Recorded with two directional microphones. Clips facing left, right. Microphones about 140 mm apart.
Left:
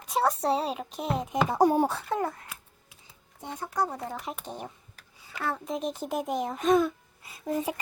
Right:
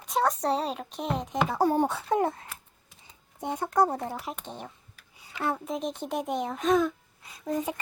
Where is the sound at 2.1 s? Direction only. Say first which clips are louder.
Right 4 dB; 25° right (ahead or behind).